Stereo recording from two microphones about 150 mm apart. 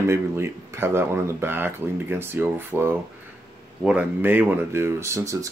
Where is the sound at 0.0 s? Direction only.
15° right (ahead or behind).